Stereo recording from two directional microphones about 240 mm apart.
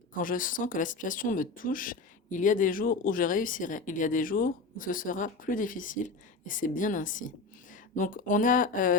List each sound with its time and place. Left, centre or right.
0.2 s a woman's voice: left